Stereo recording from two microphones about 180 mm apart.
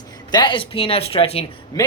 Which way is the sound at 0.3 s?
25° left (ahead or behind).